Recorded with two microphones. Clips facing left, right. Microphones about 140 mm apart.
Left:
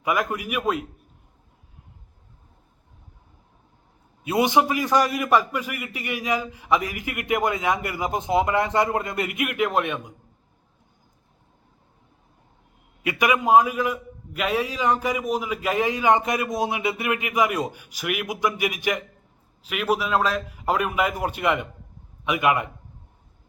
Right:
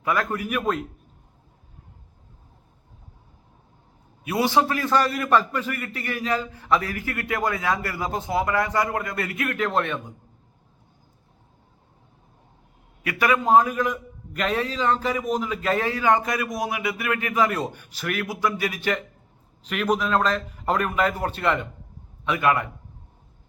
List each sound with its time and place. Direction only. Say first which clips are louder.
0.0 s a man's voice: even; 15° left (ahead or behind)
4.2 s a man's voice: left 1 dB; 20° left (ahead or behind)
13.0 s a man's voice: even; 20° left (ahead or behind)